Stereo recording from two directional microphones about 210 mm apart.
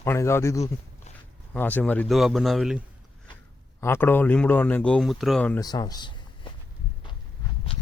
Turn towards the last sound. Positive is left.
turn(degrees=20)  # may be behind; listen again after turning